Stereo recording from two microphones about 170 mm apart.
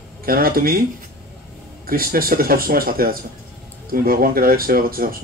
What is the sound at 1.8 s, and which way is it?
Speech, 60° right (ahead or behind).